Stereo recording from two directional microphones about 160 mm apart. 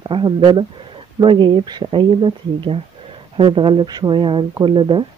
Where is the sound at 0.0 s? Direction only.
30° right (ahead or behind).